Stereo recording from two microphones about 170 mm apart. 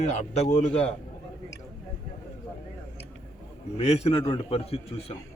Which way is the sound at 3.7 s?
35° left (ahead or behind).